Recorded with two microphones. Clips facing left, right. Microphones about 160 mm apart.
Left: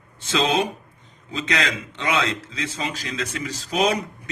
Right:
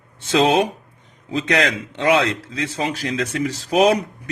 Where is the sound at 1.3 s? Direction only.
60° right (ahead or behind).